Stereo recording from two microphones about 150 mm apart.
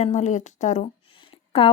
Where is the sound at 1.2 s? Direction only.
40° left (ahead or behind).